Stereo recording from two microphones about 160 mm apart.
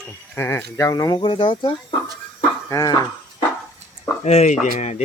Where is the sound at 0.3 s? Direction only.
15° left (ahead or behind).